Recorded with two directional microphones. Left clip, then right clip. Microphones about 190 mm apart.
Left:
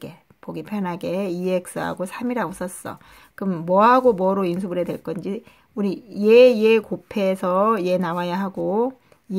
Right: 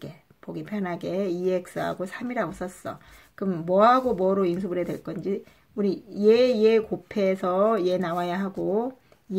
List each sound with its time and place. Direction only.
0.0 s speech: 40° left (ahead or behind)